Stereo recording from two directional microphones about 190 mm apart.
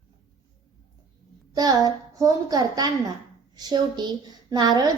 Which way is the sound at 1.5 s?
20° right (ahead or behind).